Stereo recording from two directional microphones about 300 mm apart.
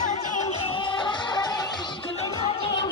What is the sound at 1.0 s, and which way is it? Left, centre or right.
Music, centre.